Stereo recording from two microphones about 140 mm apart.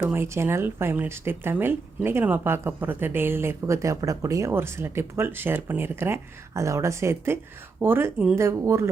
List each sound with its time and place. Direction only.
0.0 s speech: 15° right (ahead or behind)